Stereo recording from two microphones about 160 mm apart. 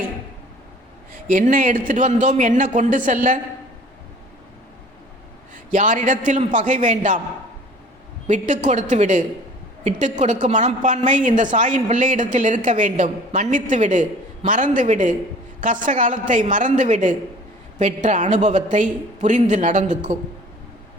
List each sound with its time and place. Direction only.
1.1 s a woman's voice: 60° right (ahead or behind)
5.7 s a woman's voice: 50° right (ahead or behind)
8.3 s a woman's voice: 50° right (ahead or behind)